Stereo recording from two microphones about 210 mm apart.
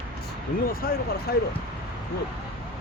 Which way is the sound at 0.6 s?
45° left (ahead or behind).